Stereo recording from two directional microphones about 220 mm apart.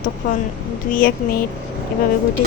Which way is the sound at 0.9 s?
40° left (ahead or behind).